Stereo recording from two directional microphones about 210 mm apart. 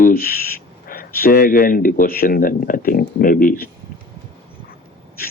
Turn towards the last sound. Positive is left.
turn(degrees=40)  # may be behind; listen again after turning